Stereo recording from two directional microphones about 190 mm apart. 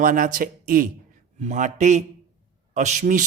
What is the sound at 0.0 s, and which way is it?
A man's voice, 45° right (ahead or behind).